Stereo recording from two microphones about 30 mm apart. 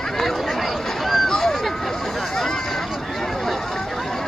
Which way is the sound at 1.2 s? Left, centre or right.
Centre.